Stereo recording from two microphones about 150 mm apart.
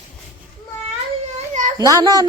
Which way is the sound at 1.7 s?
25° right (ahead or behind).